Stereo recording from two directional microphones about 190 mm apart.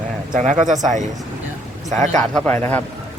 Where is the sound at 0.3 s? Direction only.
40° right (ahead or behind).